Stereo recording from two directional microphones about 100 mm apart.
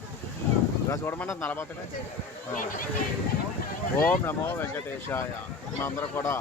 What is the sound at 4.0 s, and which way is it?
Speech, 20° left (ahead or behind).